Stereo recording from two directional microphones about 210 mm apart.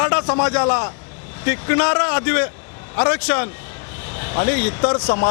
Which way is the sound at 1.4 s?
15° left (ahead or behind).